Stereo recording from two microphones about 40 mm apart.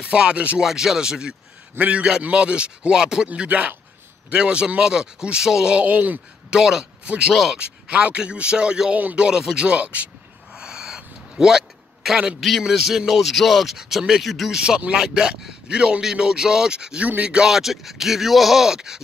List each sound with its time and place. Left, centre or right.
0.0 s speech: right
0.6 s speech: centre
1.8 s a man's voice: right; by 3.3 s centre
3.3 s a man's voice: right; by 5.7 s centre
5.9 s speech: right
6.5 s speech: centre
7.5 s a man's voice: right
10.5 s a sound: centre
12.4 s speech: centre
14.2 s speech: centre
15.0 s a man's voice: right
17.5 s speech: centre